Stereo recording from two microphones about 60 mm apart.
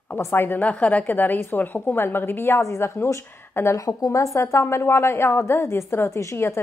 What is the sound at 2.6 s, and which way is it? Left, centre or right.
A woman's voice, left.